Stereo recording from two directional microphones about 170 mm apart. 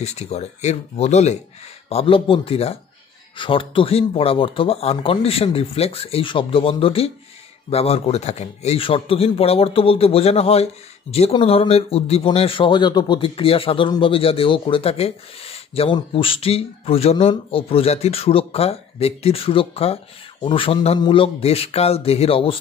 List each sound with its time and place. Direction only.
0.0 s a man's voice: 40° left (ahead or behind)